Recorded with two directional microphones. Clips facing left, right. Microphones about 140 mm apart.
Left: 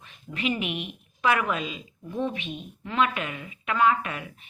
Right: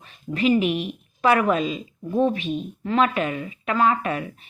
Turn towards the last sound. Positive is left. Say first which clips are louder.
# right 8 dB
turn(degrees=-40)  # may be behind; listen again after turning